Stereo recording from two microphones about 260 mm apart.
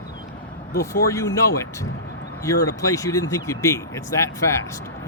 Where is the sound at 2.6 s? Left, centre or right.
Centre.